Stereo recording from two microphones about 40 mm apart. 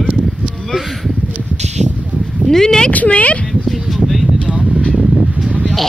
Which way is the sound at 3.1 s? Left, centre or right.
Left.